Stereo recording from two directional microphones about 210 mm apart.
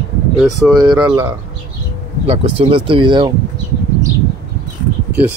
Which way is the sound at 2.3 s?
25° right (ahead or behind).